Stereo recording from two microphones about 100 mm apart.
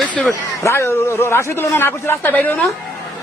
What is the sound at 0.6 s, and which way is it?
A man's voice, 25° left (ahead or behind).